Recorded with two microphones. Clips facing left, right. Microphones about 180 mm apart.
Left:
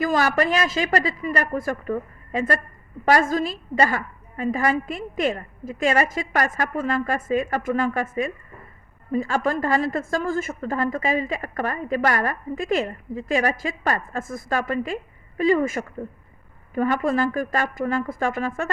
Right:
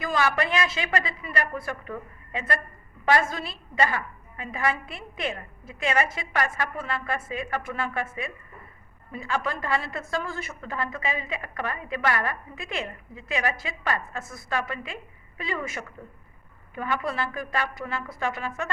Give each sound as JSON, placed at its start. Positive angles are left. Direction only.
{"t": 0.0, "sound": "a woman's voice", "side_deg": 40}